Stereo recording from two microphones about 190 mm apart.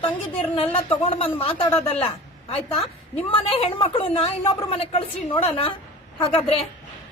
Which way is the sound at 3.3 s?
30° left (ahead or behind).